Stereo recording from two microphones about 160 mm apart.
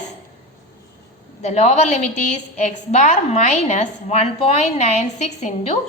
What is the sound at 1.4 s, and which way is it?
A woman's voice, 45° left (ahead or behind).